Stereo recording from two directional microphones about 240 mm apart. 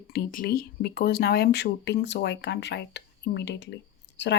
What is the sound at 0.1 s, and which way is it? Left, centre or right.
Speech, left.